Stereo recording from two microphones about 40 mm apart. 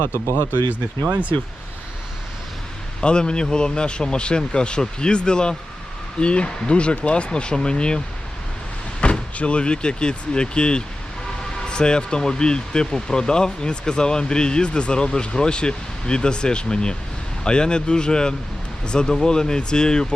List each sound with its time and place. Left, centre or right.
0.0 s speech: left
3.0 s speech: left